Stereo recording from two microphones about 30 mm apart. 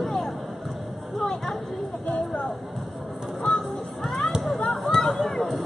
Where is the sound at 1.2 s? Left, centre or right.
Centre.